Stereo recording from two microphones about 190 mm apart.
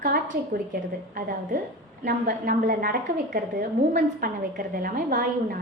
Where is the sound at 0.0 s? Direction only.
45° right (ahead or behind).